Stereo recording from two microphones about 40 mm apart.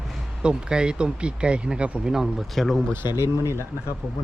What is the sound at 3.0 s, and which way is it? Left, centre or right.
Speech, right.